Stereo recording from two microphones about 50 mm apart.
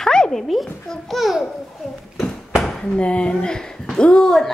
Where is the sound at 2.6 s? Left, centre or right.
Centre.